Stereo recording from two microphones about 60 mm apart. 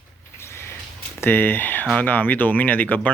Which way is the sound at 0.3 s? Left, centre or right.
Left.